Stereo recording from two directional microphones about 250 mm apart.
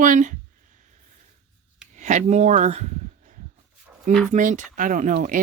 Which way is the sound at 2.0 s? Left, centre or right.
Right.